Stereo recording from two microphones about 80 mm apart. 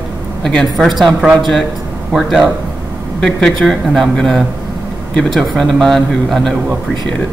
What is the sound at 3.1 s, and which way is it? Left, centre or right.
Speech, centre.